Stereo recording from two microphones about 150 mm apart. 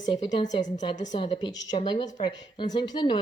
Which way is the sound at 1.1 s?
35° left (ahead or behind).